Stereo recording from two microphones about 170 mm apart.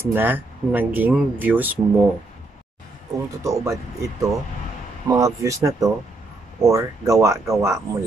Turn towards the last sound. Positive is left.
turn(degrees=-15)  # may be behind; listen again after turning